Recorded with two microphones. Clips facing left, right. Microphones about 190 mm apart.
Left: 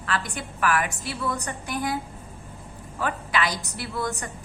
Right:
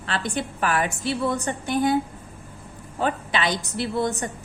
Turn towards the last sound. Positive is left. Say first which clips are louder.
# right 6 dB
turn(degrees=-25)  # may be behind; listen again after turning